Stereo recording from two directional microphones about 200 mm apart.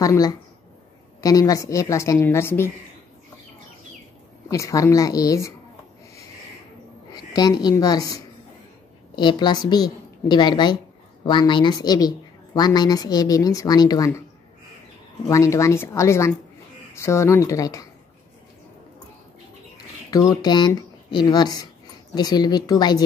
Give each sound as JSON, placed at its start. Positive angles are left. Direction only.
{"t": 0.0, "sound": "a woman's voice", "side_deg": 20}
{"t": 4.5, "sound": "a woman's voice", "side_deg": 15}
{"t": 7.1, "sound": "a woman's voice", "side_deg": 20}
{"t": 15.2, "sound": "a woman's voice", "side_deg": 15}
{"t": 20.1, "sound": "a woman's voice", "side_deg": 15}